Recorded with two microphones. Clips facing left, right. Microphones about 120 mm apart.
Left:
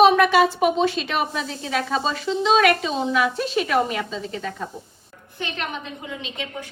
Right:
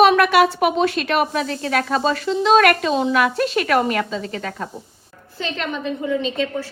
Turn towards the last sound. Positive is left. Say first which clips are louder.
# right 10 dB
turn(degrees=15)  # may be behind; listen again after turning